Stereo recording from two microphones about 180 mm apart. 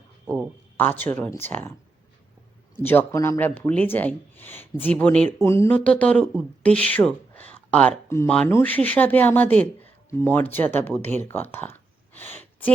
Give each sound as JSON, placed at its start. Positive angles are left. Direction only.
{"t": 0.8, "sound": "speech", "side_deg": 10}
{"t": 2.7, "sound": "speech", "side_deg": 10}
{"t": 11.2, "sound": "a sound", "side_deg": 10}